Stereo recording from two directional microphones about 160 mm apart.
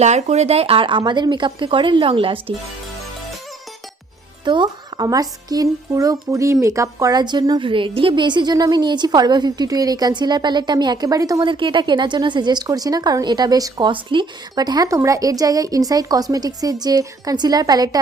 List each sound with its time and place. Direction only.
0.0 s speech: 45° right (ahead or behind)
4.4 s speech: 30° right (ahead or behind)